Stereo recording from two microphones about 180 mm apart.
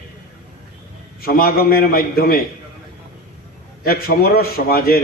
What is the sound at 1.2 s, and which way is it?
A man's voice, 55° left (ahead or behind).